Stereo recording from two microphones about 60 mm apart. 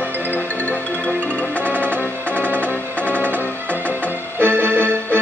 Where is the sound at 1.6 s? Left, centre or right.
Right.